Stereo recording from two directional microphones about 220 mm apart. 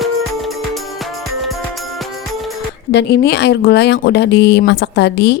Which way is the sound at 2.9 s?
50° left (ahead or behind).